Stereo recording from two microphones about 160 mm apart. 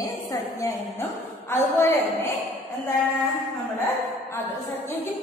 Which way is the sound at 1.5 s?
15° left (ahead or behind).